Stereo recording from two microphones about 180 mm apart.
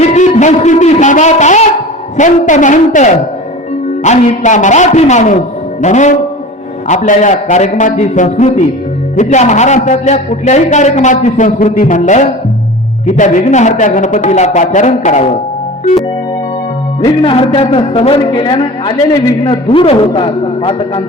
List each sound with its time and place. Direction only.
0.1 s music: 40° left (ahead or behind)
2.1 s a man's voice: 45° left (ahead or behind)
17.0 s a man's voice: 30° left (ahead or behind)